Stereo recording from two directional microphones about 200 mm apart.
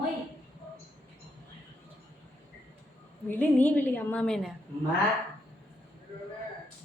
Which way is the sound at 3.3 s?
10° left (ahead or behind).